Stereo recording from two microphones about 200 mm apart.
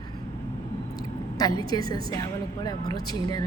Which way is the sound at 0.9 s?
20° left (ahead or behind).